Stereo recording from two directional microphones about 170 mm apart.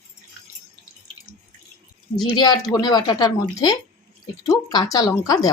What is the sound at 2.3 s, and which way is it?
A woman's voice, 25° left (ahead or behind).